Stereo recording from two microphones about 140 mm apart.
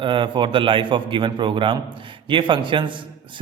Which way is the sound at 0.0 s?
35° right (ahead or behind).